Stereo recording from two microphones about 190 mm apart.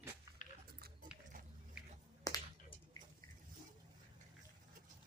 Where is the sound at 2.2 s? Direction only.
20° left (ahead or behind).